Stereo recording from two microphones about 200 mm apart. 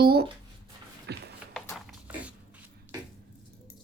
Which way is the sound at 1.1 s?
55° right (ahead or behind).